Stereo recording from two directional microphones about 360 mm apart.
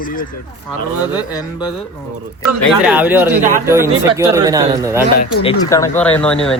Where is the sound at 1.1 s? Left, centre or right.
Centre.